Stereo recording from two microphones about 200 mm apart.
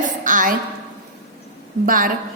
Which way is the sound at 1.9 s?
45° right (ahead or behind).